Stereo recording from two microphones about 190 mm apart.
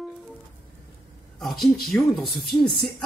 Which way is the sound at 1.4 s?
Centre (ahead or behind).